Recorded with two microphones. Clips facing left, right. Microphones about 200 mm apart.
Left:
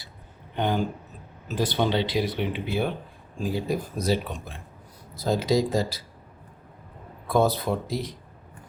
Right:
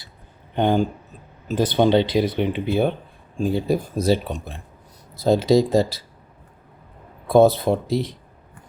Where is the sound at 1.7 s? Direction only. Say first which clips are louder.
Right 9 dB; 55° right (ahead or behind).